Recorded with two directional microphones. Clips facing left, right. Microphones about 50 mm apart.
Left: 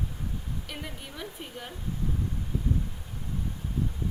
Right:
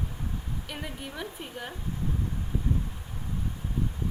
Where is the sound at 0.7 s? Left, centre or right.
Centre.